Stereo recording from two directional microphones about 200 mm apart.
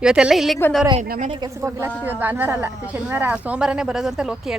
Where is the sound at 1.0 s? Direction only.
35° right (ahead or behind).